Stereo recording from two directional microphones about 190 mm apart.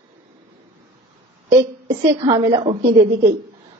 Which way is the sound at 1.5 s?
15° right (ahead or behind).